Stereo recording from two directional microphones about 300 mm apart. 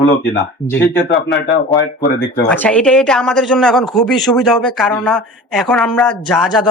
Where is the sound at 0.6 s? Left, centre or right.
Centre.